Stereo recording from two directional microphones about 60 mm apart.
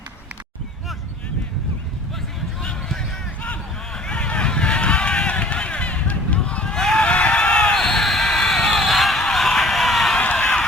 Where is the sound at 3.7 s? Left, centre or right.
Centre.